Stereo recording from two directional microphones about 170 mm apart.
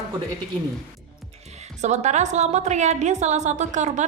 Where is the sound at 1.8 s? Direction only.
40° right (ahead or behind).